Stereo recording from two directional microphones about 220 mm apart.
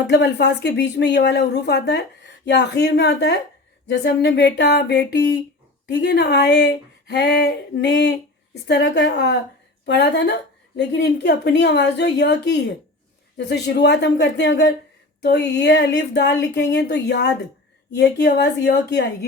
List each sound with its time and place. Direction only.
0.1 s speech: 50° left (ahead or behind)